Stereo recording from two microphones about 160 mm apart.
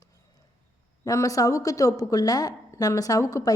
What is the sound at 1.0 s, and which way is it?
A woman's voice, 20° left (ahead or behind).